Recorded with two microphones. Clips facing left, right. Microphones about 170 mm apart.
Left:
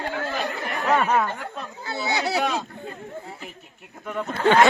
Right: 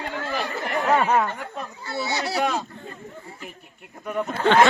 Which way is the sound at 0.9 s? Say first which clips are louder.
Even; 20° right (ahead or behind).